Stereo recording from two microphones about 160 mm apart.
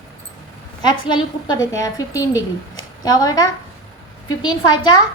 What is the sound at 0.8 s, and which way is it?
A woman's voice, 30° left (ahead or behind).